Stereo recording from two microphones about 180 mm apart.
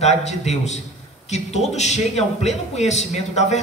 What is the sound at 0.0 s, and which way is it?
A man's voice, 40° left (ahead or behind).